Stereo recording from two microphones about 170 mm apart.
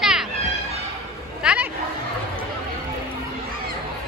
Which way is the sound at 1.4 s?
5° right (ahead or behind).